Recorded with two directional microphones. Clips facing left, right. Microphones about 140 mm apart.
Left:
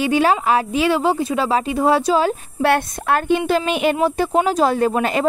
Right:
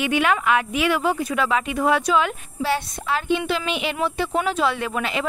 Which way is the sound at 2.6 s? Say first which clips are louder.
Left 6 dB; 55° left (ahead or behind).